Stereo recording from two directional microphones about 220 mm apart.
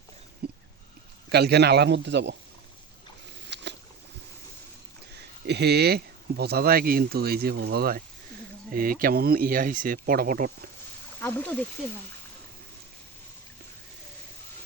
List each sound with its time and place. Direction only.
0.4 s a sound: 45° right (ahead or behind)
1.3 s a man's voice: 50° right (ahead or behind)
3.5 s boat: 50° right (ahead or behind)
5.1 s speech: 50° right (ahead or behind)
11.2 s speech: 10° left (ahead or behind)